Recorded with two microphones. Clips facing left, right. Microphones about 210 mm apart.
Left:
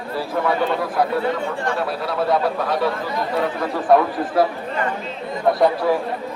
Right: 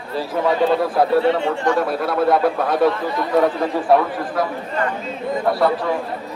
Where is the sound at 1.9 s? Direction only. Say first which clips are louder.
Right 3 dB; 50° right (ahead or behind).